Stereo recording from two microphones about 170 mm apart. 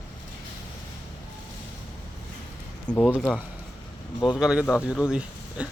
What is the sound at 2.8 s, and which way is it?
Speech, 10° left (ahead or behind).